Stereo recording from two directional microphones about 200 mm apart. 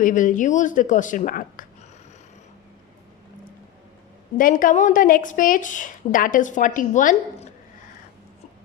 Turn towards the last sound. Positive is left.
turn(degrees=40)  # may be behind; listen again after turning